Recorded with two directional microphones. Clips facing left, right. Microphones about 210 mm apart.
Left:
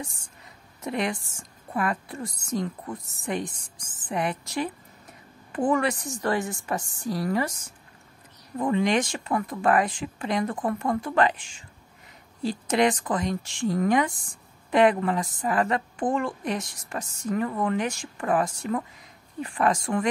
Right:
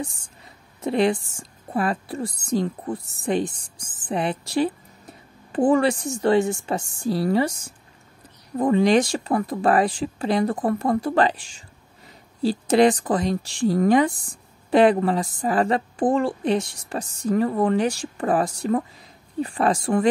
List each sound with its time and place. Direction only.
0.7 s a woman's voice: 30° right (ahead or behind)
8.5 s a woman's voice: 35° right (ahead or behind)